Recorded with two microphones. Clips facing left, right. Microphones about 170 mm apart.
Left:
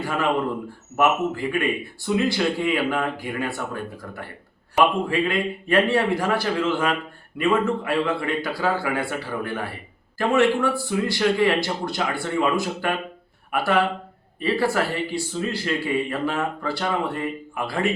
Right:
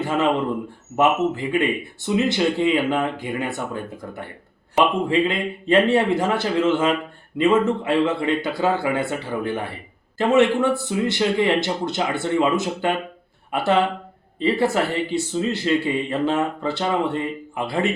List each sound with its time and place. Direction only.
0.0 s speech: 20° right (ahead or behind)